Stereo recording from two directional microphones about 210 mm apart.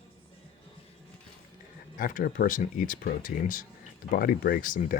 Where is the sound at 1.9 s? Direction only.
40° left (ahead or behind).